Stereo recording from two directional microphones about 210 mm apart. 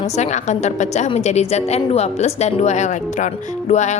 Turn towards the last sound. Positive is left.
turn(degrees=35)  # may be behind; listen again after turning